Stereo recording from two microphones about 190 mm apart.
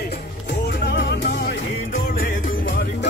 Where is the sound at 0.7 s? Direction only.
70° left (ahead or behind); by 2.7 s 45° left (ahead or behind).